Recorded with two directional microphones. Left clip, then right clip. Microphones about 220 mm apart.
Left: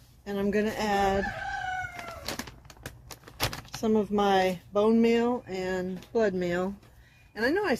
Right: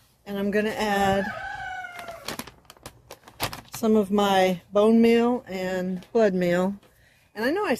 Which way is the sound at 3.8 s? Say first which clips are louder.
Right 4 dB; 50° right (ahead or behind).